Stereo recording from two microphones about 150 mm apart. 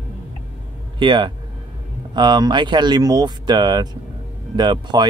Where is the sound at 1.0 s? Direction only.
30° right (ahead or behind).